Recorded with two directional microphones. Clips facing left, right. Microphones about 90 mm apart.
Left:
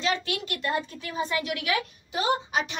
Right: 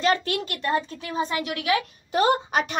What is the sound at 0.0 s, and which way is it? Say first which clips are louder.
A woman's voice: right 5 dB; 45° right (ahead or behind).